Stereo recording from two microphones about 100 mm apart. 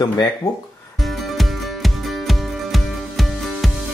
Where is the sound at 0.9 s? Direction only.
Centre (ahead or behind).